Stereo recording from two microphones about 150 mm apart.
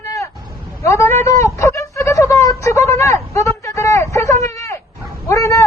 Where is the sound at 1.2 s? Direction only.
20° left (ahead or behind).